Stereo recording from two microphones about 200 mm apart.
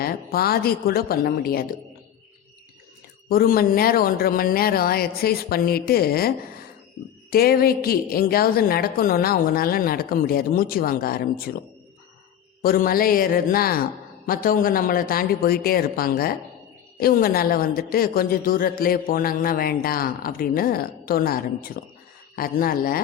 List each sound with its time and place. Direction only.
0.0 s a woman's voice: 50° left (ahead or behind)
3.2 s a woman's voice: 50° left (ahead or behind)
12.6 s a woman's voice: 45° left (ahead or behind)